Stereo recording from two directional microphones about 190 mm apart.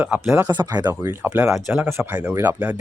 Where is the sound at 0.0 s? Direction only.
10° right (ahead or behind).